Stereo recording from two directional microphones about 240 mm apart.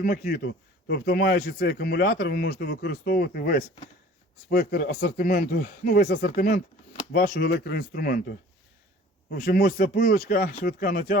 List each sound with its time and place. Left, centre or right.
0.0 s speech: left